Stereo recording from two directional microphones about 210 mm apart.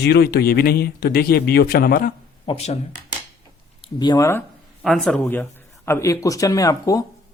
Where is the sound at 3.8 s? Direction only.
20° left (ahead or behind).